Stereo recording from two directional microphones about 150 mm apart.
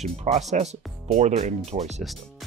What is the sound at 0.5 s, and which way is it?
Speech, 50° right (ahead or behind).